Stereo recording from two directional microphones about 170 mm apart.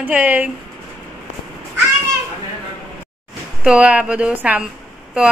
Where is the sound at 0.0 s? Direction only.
10° right (ahead or behind).